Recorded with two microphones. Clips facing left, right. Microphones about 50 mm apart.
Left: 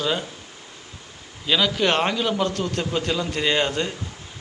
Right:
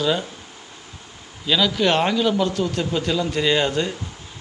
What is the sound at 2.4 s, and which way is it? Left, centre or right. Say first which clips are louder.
Speech: right 2 dB; left.